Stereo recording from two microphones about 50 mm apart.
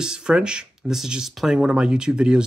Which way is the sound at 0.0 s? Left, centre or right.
Centre.